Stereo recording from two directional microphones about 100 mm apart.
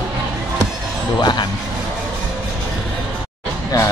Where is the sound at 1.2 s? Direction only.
50° left (ahead or behind).